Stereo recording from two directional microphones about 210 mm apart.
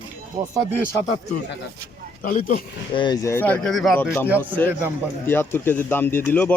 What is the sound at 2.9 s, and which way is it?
Speech, 20° left (ahead or behind).